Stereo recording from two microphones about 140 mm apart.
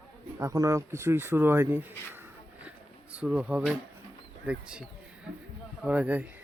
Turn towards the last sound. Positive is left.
turn(degrees=-10)  # may be behind; listen again after turning